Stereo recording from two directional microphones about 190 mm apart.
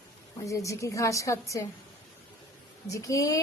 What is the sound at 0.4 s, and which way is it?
A woman's voice, 15° left (ahead or behind).